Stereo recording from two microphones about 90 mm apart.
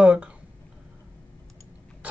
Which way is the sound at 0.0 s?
15° right (ahead or behind).